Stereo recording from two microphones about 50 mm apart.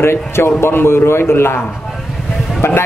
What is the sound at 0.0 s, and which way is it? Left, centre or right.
Speech, left.